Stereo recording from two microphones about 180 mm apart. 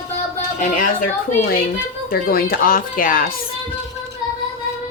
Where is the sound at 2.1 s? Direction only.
55° left (ahead or behind).